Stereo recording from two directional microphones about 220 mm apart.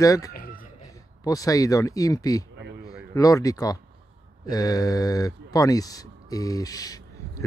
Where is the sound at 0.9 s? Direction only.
15° left (ahead or behind).